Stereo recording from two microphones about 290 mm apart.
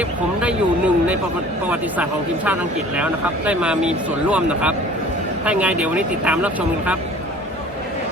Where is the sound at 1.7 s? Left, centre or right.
Centre.